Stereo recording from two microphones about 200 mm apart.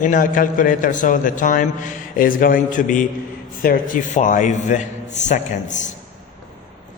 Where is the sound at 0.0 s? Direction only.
40° left (ahead or behind).